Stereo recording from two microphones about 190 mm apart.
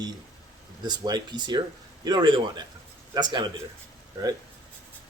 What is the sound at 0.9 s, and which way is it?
Speech, 20° right (ahead or behind).